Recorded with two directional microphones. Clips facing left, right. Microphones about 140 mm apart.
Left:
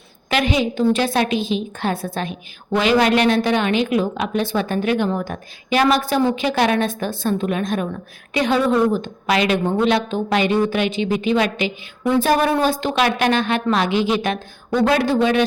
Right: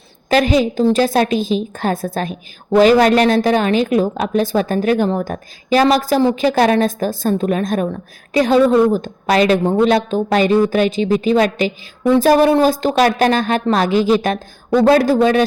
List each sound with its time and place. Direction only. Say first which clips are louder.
0.3 s a woman's voice: right 5 dB; 40° right (ahead or behind)